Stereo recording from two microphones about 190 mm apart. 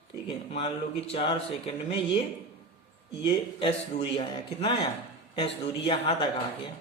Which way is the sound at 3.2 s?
25° left (ahead or behind).